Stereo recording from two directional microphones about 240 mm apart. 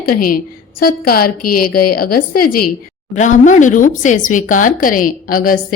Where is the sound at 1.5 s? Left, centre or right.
Left.